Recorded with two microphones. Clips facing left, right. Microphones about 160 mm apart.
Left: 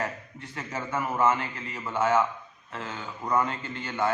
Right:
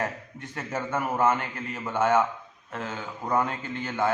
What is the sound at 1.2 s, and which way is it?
A man's voice, 50° right (ahead or behind).